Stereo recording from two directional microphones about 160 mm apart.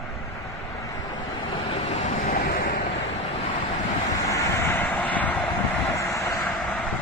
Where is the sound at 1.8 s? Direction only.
55° left (ahead or behind).